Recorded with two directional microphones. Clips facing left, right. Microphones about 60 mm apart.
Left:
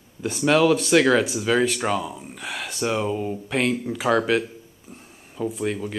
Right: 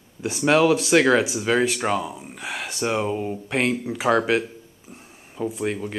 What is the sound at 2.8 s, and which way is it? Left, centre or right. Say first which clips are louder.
Speech: even; right.